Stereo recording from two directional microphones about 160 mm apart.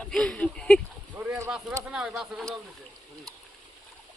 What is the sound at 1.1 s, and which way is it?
Boat, 5° right (ahead or behind).